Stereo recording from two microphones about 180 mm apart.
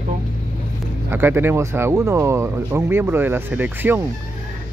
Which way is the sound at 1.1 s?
10° right (ahead or behind).